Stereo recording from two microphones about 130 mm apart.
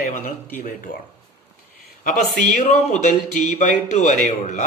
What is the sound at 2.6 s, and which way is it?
Speech, 65° left (ahead or behind).